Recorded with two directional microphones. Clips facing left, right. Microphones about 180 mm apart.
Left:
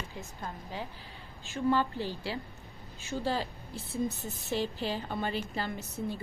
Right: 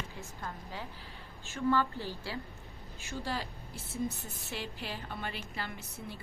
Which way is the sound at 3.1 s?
25° left (ahead or behind).